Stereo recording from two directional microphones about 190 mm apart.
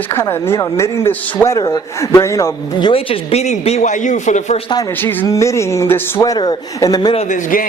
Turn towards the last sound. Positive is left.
turn(degrees=45)  # may be behind; listen again after turning